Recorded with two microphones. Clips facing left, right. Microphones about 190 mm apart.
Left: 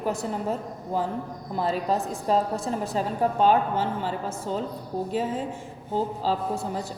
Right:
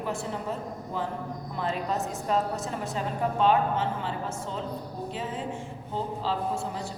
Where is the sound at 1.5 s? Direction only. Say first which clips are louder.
Left 5 dB; 35° left (ahead or behind).